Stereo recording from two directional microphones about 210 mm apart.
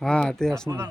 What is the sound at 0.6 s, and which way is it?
Speech, 15° right (ahead or behind).